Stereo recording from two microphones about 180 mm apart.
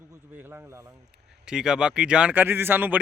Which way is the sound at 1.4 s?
5° right (ahead or behind).